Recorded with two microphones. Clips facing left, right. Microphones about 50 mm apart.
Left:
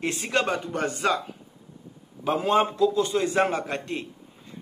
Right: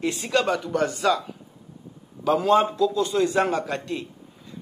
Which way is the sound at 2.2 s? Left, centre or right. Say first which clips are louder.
Right 3 dB; left.